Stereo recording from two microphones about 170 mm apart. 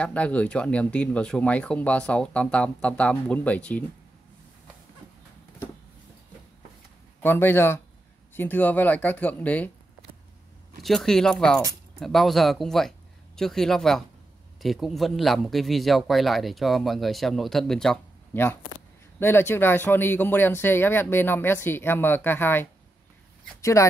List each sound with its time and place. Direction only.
0.0 s speech: 10° left (ahead or behind)
7.2 s speech: 15° left (ahead or behind)
10.8 s a man's voice: centre (ahead or behind); by 23.9 s 20° left (ahead or behind)